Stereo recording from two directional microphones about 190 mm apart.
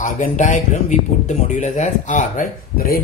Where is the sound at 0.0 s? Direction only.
40° left (ahead or behind).